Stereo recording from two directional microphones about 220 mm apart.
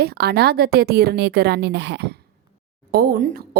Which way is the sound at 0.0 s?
45° right (ahead or behind).